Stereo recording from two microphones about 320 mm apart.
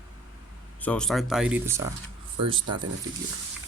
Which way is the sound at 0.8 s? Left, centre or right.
Centre.